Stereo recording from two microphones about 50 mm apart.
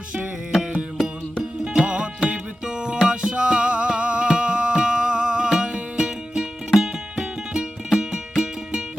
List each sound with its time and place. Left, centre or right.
0.5 s music: centre